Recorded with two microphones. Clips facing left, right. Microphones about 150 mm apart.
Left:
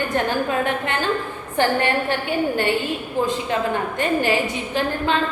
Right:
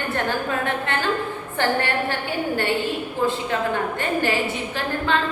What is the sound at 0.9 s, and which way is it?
A woman's voice, 15° left (ahead or behind).